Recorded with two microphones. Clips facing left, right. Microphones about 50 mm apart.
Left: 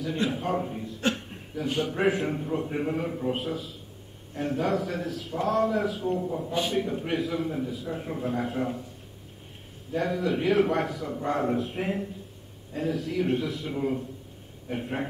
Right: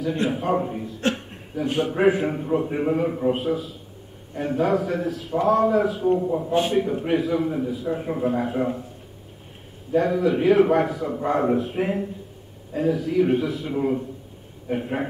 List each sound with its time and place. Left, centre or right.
0.4 s a man's voice: centre
3.3 s a man's voice: centre
6.2 s a man's voice: centre
6.7 s a man's voice: centre
9.9 s a man's voice: centre